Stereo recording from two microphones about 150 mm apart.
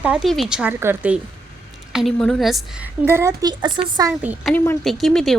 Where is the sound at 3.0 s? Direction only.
15° right (ahead or behind).